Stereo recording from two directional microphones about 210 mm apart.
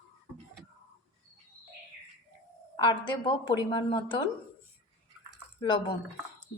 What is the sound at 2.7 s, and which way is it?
Speech, 20° left (ahead or behind).